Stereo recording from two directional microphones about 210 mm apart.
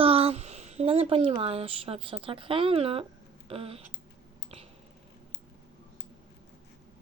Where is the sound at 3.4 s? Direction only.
25° right (ahead or behind).